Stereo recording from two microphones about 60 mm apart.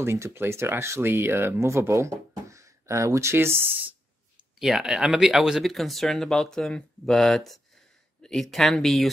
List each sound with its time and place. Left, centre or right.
0.0 s speech: right
4.6 s speech: centre